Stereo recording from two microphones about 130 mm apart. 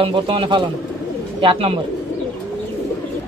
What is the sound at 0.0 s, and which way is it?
Speech, 40° right (ahead or behind).